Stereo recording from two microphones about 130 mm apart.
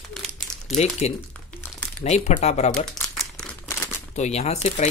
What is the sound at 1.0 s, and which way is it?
Speech, 55° left (ahead or behind).